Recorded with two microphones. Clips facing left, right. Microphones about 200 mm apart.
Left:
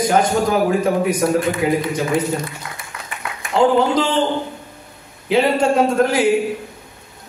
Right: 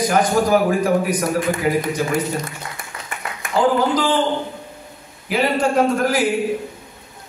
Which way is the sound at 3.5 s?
25° left (ahead or behind).